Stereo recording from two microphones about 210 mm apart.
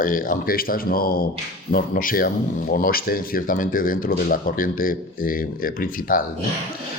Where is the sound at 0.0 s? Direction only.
40° left (ahead or behind).